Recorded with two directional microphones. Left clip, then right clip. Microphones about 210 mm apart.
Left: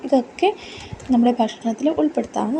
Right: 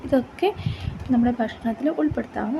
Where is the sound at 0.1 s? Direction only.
Centre (ahead or behind).